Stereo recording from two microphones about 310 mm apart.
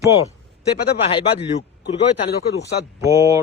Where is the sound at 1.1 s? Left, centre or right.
Centre.